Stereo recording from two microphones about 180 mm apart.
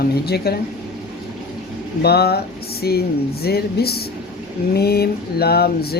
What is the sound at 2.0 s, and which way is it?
A woman's voice, 60° left (ahead or behind).